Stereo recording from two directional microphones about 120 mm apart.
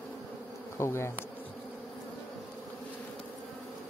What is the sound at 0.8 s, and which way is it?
Bee, 20° left (ahead or behind).